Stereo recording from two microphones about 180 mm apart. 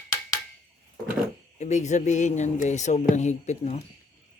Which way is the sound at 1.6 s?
40° left (ahead or behind).